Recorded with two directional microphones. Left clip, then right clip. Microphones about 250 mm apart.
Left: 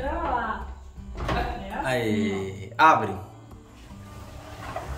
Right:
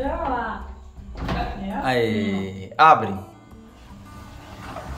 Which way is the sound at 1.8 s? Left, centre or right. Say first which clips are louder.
Right 4 dB; centre.